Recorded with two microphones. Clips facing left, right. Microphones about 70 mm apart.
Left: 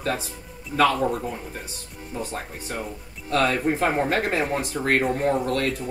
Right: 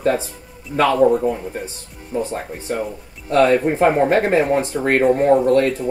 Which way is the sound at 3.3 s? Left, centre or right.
Right.